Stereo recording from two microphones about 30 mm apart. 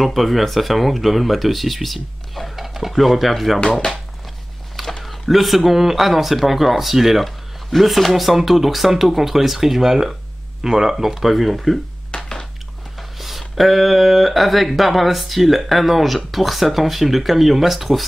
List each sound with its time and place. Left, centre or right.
0.0 s speech: centre
5.0 s speech: centre
12.2 s a sound: left
13.2 s speech: centre